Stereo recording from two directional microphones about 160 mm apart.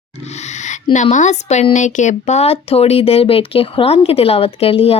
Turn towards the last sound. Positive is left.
turn(degrees=35)  # may be behind; listen again after turning